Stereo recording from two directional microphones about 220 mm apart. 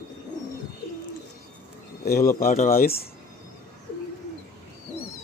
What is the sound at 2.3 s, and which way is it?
Speech, 35° left (ahead or behind).